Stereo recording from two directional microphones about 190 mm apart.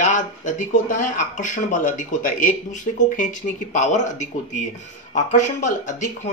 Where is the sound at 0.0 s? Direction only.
40° left (ahead or behind).